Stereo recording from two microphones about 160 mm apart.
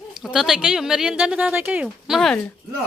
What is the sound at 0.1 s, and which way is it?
Speech, centre (ahead or behind).